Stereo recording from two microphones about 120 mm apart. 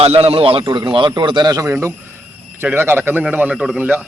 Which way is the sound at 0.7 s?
35° right (ahead or behind).